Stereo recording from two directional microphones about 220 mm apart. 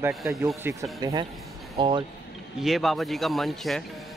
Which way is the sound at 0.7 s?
10° right (ahead or behind).